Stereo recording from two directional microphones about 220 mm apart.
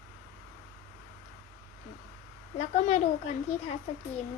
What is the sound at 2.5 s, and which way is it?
Speech, 30° left (ahead or behind).